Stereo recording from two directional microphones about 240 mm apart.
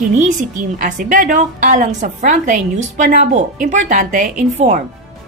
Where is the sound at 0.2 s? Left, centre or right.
Right.